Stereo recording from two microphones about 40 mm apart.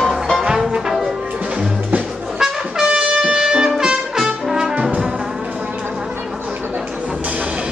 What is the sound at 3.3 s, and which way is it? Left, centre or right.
Music, centre.